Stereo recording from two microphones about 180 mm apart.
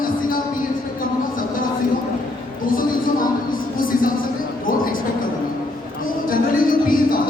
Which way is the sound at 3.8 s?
50° left (ahead or behind).